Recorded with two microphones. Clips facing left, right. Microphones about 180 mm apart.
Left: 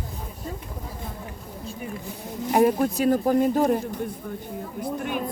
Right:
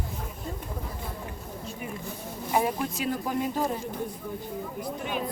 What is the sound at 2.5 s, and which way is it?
Speech, 55° left (ahead or behind).